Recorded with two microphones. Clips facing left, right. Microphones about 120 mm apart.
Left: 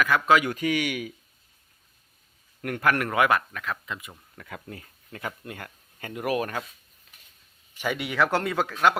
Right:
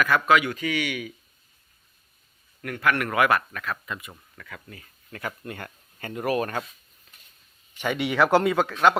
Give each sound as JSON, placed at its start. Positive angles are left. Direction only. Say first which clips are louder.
{"t": 0.3, "sound": "speech", "louder": "even", "side_deg": 40}
{"t": 2.6, "sound": "speech", "louder": "even", "side_deg": 45}
{"t": 3.0, "sound": "speech", "louder": "right 1 dB", "side_deg": 20}
{"t": 5.5, "sound": "speech", "louder": "right 2 dB", "side_deg": 10}
{"t": 7.8, "sound": "speech", "louder": "right 3 dB", "side_deg": 5}
{"t": 8.5, "sound": "speech", "louder": "right 2 dB", "side_deg": 10}